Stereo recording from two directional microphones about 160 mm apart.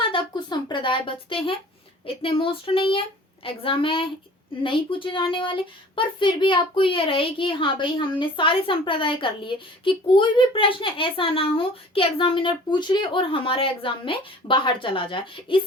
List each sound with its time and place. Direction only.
0.0 s speech: 30° left (ahead or behind)